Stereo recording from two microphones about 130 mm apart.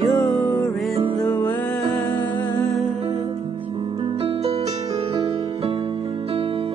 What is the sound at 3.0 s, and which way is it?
Music, 45° right (ahead or behind).